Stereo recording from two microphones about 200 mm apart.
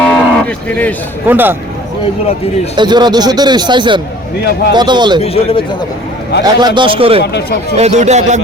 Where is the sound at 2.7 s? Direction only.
20° right (ahead or behind).